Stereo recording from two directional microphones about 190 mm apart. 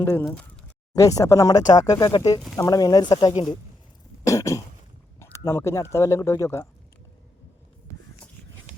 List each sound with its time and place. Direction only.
0.0 s speech: 10° left (ahead or behind)
0.9 s speech: 15° left (ahead or behind)
4.2 s cough: 15° left (ahead or behind)
5.5 s speech: 15° left (ahead or behind)